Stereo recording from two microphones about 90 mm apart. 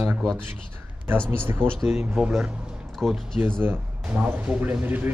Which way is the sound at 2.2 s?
10° right (ahead or behind).